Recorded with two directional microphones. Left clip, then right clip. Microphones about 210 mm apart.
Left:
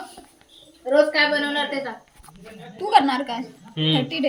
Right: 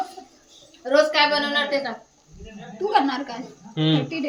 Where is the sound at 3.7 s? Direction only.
15° right (ahead or behind).